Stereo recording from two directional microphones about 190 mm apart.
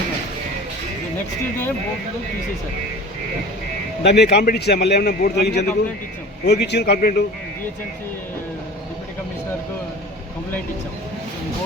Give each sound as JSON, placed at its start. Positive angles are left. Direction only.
{"t": 4.0, "sound": "a man's voice", "side_deg": 60}